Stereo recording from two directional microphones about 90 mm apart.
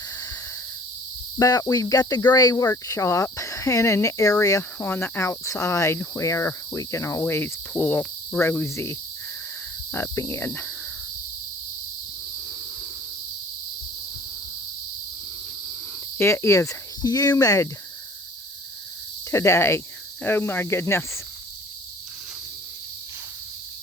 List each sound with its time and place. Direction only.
1.4 s cricket: 40° left (ahead or behind)
4.8 s cricket: 25° left (ahead or behind)
16.1 s cricket: 30° left (ahead or behind)
19.3 s cricket: 30° left (ahead or behind)